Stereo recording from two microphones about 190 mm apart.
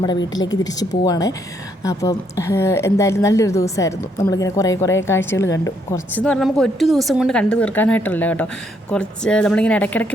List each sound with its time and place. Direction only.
0.3 s a woman's voice: 20° left (ahead or behind)